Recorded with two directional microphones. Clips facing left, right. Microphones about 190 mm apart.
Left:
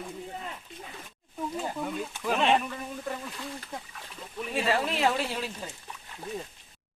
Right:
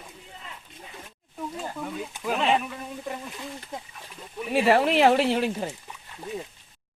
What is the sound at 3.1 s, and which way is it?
Speech, 20° right (ahead or behind).